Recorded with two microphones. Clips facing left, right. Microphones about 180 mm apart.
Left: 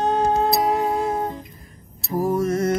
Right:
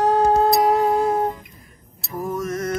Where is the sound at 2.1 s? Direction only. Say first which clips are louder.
Left 5 dB; 35° left (ahead or behind).